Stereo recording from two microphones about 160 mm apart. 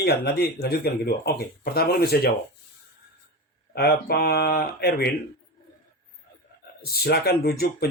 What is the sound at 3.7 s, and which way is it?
Speech, 75° left (ahead or behind).